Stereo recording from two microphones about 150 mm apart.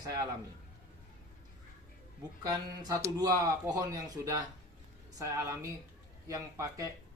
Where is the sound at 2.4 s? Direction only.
25° right (ahead or behind).